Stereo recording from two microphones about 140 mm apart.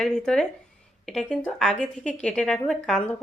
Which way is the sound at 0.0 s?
5° left (ahead or behind).